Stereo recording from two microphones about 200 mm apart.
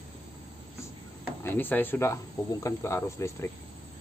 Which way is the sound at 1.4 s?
10° left (ahead or behind).